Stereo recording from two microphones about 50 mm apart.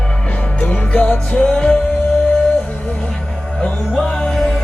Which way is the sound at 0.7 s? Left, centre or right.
Left.